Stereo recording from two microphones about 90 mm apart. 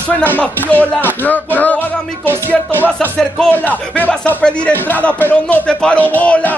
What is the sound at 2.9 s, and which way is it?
Speech, 5° left (ahead or behind).